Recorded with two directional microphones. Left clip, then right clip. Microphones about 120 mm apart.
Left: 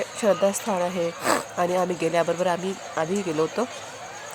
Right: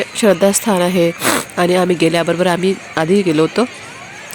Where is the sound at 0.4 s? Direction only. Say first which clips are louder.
Right 9 dB; 35° right (ahead or behind).